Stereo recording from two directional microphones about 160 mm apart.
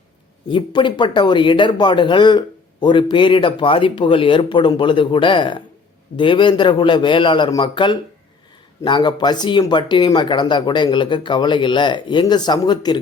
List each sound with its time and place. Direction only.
0.5 s speech: 30° left (ahead or behind)